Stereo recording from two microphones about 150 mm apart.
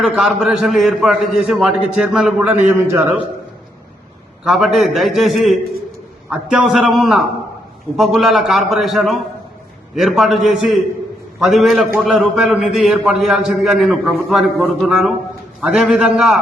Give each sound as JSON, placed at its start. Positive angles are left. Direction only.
{"t": 0.0, "sound": "a man's voice", "side_deg": -5}
{"t": 4.4, "sound": "a man's voice", "side_deg": 0}